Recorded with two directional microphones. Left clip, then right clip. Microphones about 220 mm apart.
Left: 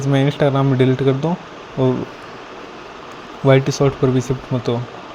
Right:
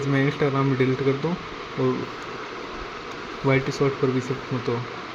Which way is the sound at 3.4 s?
35° left (ahead or behind).